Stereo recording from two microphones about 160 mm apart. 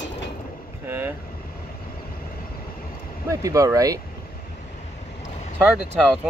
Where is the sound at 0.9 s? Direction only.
15° right (ahead or behind).